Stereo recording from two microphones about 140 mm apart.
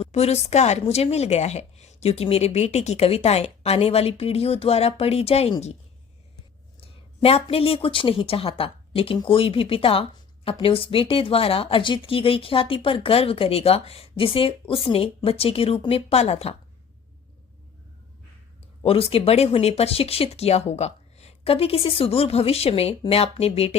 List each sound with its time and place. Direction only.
0.0 s a woman's voice: 50° left (ahead or behind)
6.8 s speech: 45° left (ahead or behind)
18.8 s a woman's voice: 45° left (ahead or behind)